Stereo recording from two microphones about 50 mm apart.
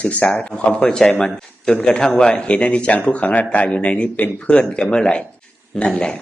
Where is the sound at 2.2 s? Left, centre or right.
Left.